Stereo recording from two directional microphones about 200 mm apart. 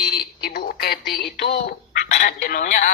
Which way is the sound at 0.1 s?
50° left (ahead or behind).